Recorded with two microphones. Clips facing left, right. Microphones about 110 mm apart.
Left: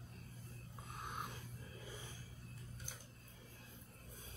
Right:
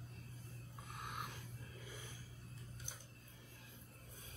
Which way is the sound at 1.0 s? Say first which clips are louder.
Left 1 dB; 25° left (ahead or behind).